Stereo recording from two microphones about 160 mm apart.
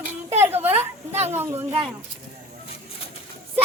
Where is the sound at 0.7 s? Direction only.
40° right (ahead or behind).